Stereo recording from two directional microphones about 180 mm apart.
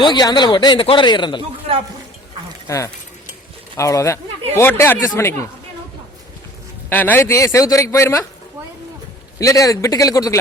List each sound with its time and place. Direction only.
0.0 s a man's voice: 25° left (ahead or behind)
2.6 s a man's voice: 15° left (ahead or behind)
6.9 s a man's voice: 10° left (ahead or behind)
9.4 s a man's voice: 20° left (ahead or behind)